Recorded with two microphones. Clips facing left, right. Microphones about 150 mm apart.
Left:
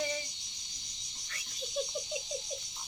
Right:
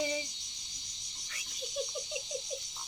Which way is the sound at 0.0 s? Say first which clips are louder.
Right 2 dB; 10° right (ahead or behind).